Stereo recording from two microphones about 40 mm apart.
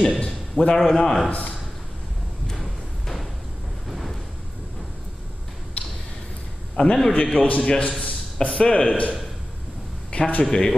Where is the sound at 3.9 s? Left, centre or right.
Centre.